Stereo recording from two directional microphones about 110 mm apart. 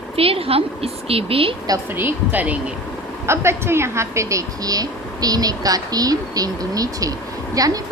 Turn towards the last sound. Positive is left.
turn(degrees=-30)  # may be behind; listen again after turning